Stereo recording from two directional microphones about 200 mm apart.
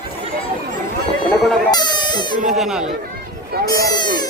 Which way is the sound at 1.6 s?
20° left (ahead or behind).